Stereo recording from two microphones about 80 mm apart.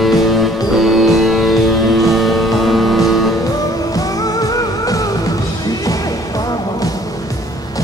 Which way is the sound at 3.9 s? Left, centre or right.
Left.